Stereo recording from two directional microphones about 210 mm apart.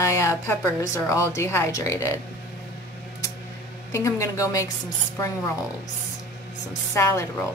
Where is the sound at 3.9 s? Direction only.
15° left (ahead or behind).